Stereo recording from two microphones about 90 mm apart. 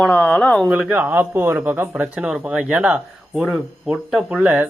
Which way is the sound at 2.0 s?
10° right (ahead or behind).